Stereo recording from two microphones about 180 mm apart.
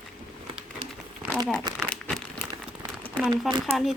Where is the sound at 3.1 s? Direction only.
5° left (ahead or behind).